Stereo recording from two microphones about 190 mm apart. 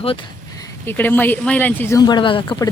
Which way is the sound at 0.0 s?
25° left (ahead or behind).